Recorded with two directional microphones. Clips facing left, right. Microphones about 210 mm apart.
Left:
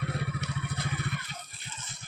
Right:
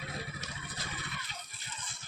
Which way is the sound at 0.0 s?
60° left (ahead or behind).